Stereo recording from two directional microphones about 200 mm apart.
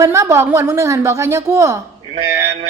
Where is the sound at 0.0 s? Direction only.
15° right (ahead or behind).